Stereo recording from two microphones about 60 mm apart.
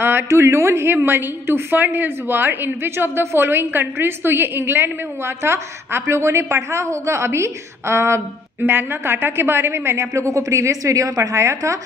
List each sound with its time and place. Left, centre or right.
0.3 s a woman's voice: right
0.8 s a woman's voice: right
8.6 s a woman's voice: right
10.8 s a woman's voice: right